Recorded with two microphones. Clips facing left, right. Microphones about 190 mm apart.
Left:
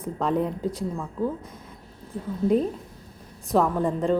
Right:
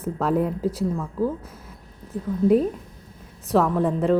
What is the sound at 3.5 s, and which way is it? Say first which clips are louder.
Speech: right 2 dB; centre (ahead or behind).